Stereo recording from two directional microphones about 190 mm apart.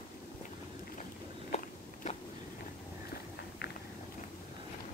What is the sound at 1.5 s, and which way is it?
Biting, 35° left (ahead or behind).